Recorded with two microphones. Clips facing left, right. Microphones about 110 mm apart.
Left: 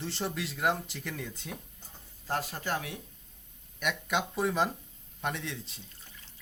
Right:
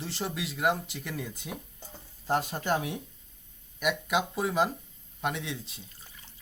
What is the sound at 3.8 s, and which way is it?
Speech, 5° right (ahead or behind).